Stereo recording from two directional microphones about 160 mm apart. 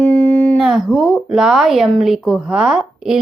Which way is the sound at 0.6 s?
Centre (ahead or behind).